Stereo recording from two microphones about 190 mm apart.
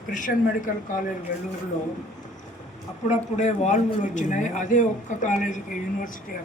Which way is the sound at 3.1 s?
35° left (ahead or behind).